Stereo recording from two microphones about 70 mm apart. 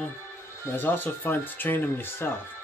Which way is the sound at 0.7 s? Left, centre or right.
Left.